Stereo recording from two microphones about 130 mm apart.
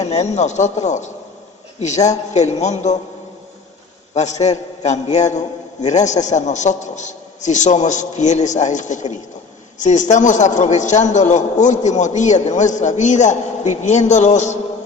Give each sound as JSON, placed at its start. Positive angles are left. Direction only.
{"t": 0.0, "sound": "a man's voice", "side_deg": 60}
{"t": 4.1, "sound": "a man's voice", "side_deg": 60}